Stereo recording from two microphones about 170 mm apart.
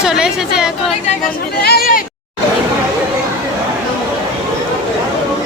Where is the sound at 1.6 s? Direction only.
65° left (ahead or behind).